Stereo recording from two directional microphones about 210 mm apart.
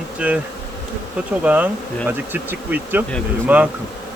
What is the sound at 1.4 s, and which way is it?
Bee, 5° right (ahead or behind).